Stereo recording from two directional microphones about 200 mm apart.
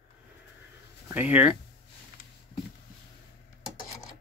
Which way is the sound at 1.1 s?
5° right (ahead or behind).